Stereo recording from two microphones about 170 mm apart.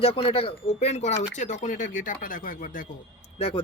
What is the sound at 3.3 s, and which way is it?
Speech, 35° left (ahead or behind).